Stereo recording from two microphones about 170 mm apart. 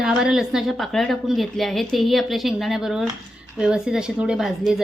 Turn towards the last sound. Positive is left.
turn(degrees=0)  # may be behind; listen again after turning